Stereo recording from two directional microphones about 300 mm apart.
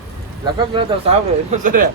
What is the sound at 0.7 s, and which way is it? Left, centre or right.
Speech, right.